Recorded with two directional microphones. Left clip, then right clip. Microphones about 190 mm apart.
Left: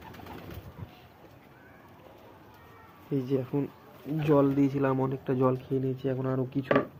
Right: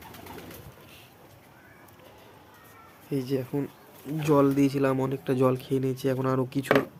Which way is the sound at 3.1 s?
10° right (ahead or behind).